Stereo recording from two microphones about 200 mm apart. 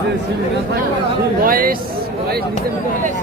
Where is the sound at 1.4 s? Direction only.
45° right (ahead or behind).